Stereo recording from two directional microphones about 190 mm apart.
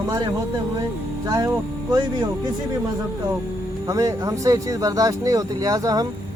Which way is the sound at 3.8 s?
15° right (ahead or behind).